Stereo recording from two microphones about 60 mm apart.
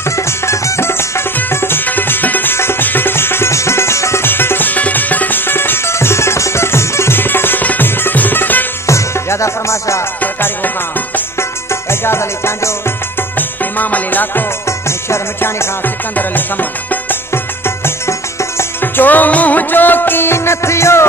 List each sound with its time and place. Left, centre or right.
0.1 s music: left
1.9 s music: left
4.3 s music: left
8.8 s music: left
10.2 s music: left
11.3 s music: left
13.7 s music: left
14.9 s music: left
16.2 s music: left
17.3 s music: left